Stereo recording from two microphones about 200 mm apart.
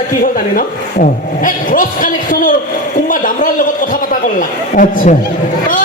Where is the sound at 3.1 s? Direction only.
40° left (ahead or behind).